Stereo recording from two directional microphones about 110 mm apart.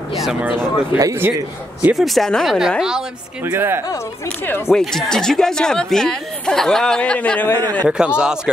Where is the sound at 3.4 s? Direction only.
20° right (ahead or behind).